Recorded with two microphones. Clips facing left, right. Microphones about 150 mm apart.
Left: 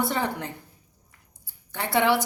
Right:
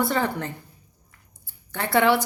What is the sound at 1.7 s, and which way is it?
Speech, 15° left (ahead or behind).